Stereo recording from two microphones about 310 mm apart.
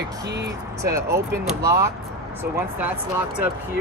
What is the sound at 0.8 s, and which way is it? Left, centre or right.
Speech, centre.